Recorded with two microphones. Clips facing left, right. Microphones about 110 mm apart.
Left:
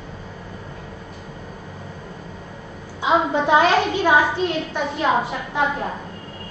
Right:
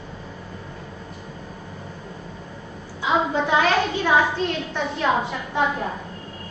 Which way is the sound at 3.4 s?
20° left (ahead or behind).